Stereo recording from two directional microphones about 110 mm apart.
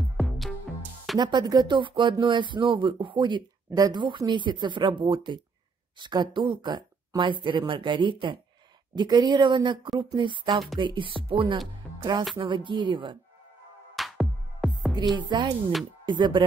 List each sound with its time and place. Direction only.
1.1 s speech: 40° right (ahead or behind)
10.5 s speech: centre (ahead or behind)
10.8 s speech: 45° right (ahead or behind)
12.0 s speech: 45° right (ahead or behind)
13.9 s music: centre (ahead or behind)
15.1 s speech: 45° right (ahead or behind)